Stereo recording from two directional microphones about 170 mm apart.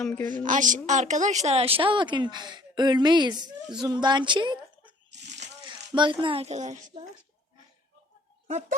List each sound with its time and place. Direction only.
0.0 s a woman's voice: 5° left (ahead or behind)
0.3 s a woman's voice: 50° right (ahead or behind); by 4.5 s 25° right (ahead or behind)
5.1 s a sound: 90° right
5.6 s speech: 25° right (ahead or behind); by 6.7 s 40° right (ahead or behind)